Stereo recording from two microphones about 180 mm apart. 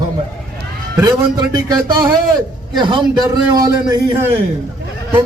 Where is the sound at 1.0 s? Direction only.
20° right (ahead or behind).